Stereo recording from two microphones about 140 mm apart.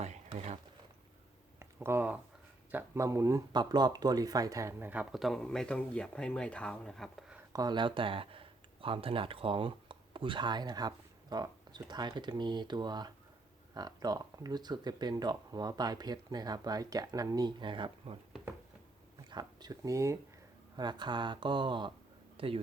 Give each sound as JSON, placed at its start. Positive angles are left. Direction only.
{"t": 0.0, "sound": "a sound", "side_deg": -50}
{"t": 1.5, "sound": "a sound", "side_deg": -15}
{"t": 2.7, "sound": "speech", "side_deg": -20}
{"t": 5.1, "sound": "speech", "side_deg": 0}
{"t": 7.5, "sound": "speech", "side_deg": -30}
{"t": 19.3, "sound": "speech", "side_deg": -30}